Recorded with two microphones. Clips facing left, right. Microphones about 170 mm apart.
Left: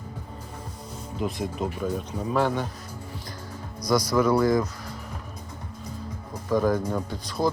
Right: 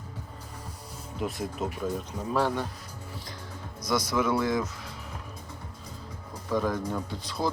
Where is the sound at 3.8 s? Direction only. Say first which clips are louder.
Left 5 dB; centre (ahead or behind).